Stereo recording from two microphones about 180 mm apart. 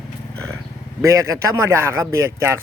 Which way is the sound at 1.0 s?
15° right (ahead or behind).